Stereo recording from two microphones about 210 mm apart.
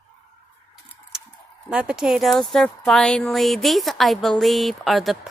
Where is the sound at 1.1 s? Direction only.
5° right (ahead or behind).